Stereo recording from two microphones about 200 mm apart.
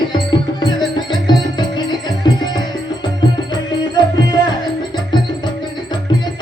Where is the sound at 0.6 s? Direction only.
20° left (ahead or behind).